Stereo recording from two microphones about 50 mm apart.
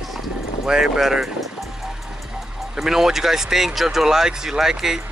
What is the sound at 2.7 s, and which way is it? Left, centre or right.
Speech, centre.